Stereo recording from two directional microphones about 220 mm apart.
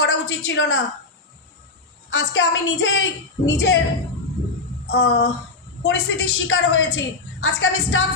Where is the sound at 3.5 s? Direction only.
50° left (ahead or behind).